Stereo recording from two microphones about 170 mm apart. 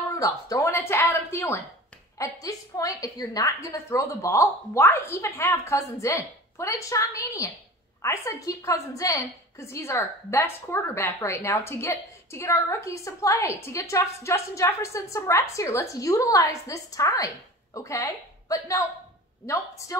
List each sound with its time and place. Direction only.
0.1 s a woman's voice: 20° left (ahead or behind)